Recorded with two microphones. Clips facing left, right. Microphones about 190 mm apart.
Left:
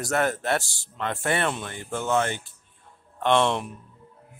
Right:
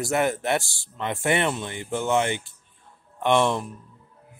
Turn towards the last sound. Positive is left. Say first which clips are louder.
# right 1 dB
turn(degrees=-10)  # may be behind; listen again after turning